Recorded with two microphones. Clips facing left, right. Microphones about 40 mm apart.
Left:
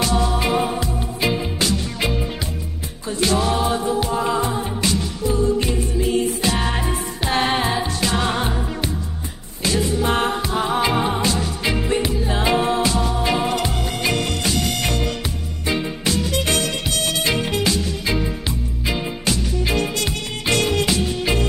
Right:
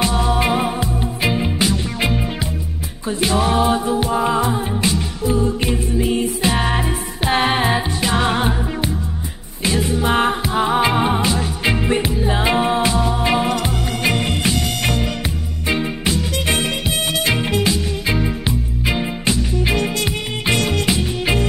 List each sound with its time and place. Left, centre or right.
0.0 s music: right
4.2 s a capella: centre
5.7 s music: centre